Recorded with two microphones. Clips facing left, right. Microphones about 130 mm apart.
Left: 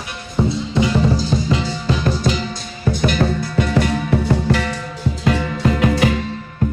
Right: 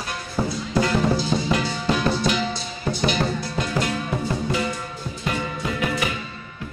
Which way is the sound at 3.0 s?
55° left (ahead or behind).